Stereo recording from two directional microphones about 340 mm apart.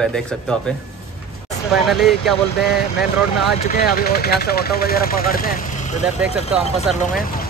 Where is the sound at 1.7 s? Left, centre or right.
Centre.